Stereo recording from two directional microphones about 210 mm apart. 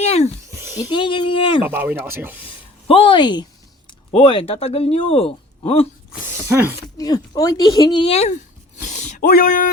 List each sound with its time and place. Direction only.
0.0 s a sound: 30° left (ahead or behind)
0.8 s speech: 20° left (ahead or behind)
1.6 s speech: 10° right (ahead or behind)
2.8 s speech: 25° left (ahead or behind)
6.5 s speech: 10° right (ahead or behind)
6.9 s speech: 20° left (ahead or behind); by 9.6 s 40° left (ahead or behind)